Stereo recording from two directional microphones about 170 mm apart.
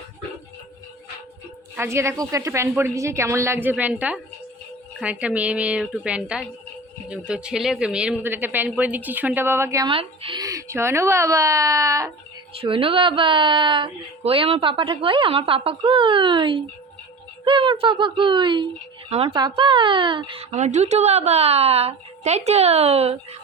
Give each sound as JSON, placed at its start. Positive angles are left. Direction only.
{"t": 1.7, "sound": "speech", "side_deg": -15}
{"t": 9.8, "sound": "speech", "side_deg": -30}
{"t": 10.4, "sound": "speech", "side_deg": -20}
{"t": 12.5, "sound": "speech", "side_deg": -30}